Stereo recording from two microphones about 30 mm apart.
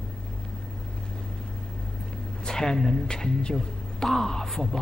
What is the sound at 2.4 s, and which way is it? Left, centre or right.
Speech, centre.